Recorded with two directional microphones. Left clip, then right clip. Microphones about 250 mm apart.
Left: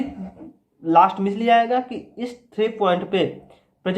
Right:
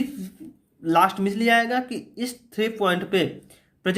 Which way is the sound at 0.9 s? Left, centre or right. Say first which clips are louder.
Left 4 dB; right.